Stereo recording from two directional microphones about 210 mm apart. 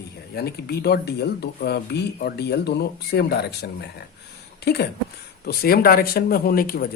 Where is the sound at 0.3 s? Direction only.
50° left (ahead or behind).